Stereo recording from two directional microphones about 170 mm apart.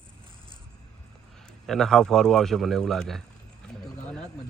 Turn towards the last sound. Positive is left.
turn(degrees=0)  # may be behind; listen again after turning